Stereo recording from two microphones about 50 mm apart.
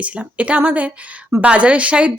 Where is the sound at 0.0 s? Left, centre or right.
Right.